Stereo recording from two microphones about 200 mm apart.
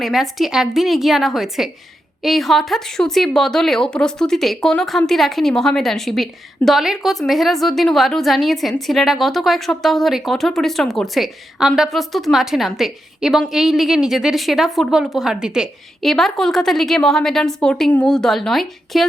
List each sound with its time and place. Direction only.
0.0 s a woman's voice: centre (ahead or behind)